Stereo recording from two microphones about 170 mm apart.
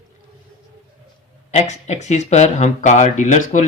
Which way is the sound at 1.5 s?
40° left (ahead or behind).